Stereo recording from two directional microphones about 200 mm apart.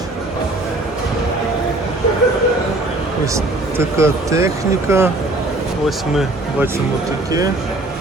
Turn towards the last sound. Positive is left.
turn(degrees=0)  # may be behind; listen again after turning